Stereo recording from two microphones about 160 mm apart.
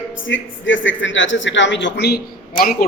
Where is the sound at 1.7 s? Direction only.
90° left.